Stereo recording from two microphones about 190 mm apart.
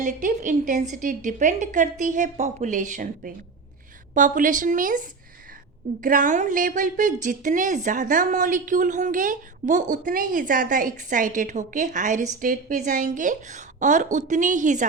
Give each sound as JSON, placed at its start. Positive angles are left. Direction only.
{"t": 0.0, "sound": "a woman's voice", "side_deg": -45}